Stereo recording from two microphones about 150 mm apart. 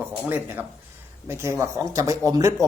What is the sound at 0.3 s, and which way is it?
Speech, 15° right (ahead or behind).